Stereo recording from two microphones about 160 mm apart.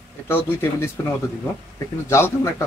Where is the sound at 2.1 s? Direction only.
15° left (ahead or behind).